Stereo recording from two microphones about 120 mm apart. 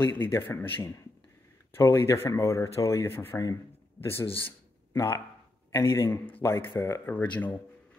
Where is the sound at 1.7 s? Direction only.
20° left (ahead or behind).